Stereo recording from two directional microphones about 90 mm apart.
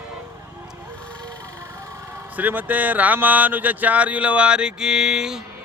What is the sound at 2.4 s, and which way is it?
Speech, 20° right (ahead or behind).